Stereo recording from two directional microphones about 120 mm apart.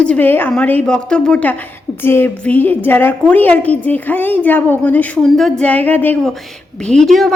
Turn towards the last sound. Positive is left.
turn(degrees=0)  # may be behind; listen again after turning